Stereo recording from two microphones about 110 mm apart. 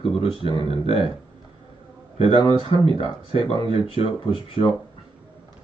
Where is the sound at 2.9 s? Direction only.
60° left (ahead or behind).